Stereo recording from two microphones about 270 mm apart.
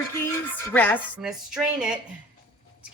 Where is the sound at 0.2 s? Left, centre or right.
Centre.